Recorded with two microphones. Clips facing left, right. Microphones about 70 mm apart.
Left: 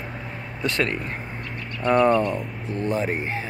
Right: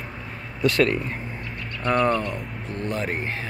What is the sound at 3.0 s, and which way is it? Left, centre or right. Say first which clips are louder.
Speech: left 2 dB; centre.